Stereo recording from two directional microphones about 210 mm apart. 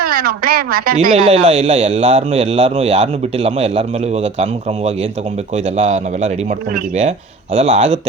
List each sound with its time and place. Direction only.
0.0 s a woman's voice: 45° right (ahead or behind)
1.1 s a man's voice: 25° right (ahead or behind)
7.5 s a man's voice: 35° right (ahead or behind)